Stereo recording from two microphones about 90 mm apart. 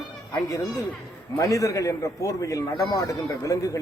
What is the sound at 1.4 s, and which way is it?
A man's voice, 35° left (ahead or behind).